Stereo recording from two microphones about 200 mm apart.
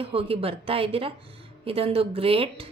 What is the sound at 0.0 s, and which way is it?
A woman's voice, 30° right (ahead or behind).